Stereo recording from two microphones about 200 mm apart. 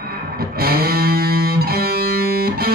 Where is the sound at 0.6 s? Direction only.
50° right (ahead or behind).